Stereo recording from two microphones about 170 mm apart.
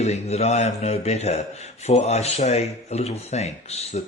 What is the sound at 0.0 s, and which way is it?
Speech, 40° left (ahead or behind).